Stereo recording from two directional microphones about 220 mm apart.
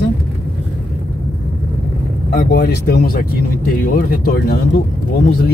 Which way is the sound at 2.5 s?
45° left (ahead or behind).